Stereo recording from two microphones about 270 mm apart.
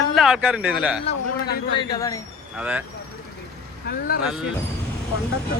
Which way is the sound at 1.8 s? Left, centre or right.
Centre.